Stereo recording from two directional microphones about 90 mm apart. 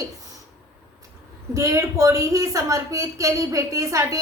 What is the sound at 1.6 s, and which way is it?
A woman's voice, 35° right (ahead or behind).